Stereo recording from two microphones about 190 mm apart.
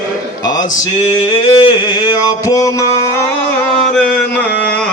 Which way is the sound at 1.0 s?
30° left (ahead or behind).